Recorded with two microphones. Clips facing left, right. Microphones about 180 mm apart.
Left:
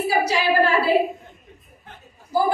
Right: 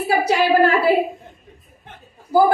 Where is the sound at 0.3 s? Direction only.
60° right (ahead or behind).